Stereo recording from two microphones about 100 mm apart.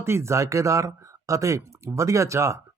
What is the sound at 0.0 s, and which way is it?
Speech, 25° right (ahead or behind).